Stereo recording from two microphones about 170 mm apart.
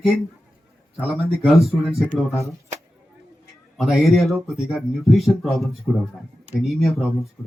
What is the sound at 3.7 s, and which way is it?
Speech, centre (ahead or behind).